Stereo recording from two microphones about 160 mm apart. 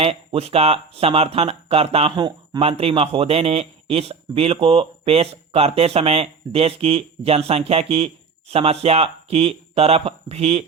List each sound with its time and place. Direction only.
0.0 s speech: 35° right (ahead or behind)